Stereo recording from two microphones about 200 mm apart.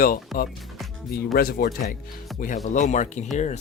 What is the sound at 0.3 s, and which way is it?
Speech, centre (ahead or behind).